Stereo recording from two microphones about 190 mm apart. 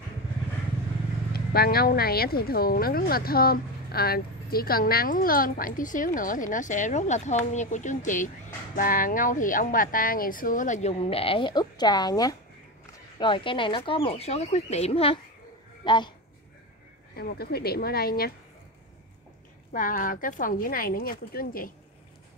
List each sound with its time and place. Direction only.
1.3 s speech: 55° left (ahead or behind); by 16.1 s 25° left (ahead or behind)
17.1 s speech: 55° left (ahead or behind)
19.7 s speech: 45° left (ahead or behind)